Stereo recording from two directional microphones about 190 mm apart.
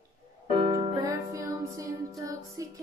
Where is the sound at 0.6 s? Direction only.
25° right (ahead or behind).